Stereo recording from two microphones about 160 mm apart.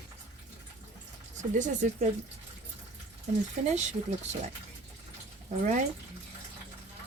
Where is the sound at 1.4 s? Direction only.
50° right (ahead or behind).